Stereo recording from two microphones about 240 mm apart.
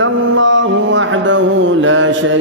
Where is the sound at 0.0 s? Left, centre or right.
Right.